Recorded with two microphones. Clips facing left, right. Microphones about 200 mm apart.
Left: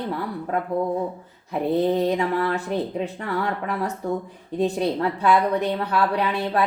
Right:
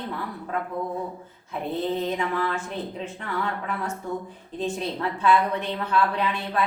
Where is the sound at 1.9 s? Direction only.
35° left (ahead or behind).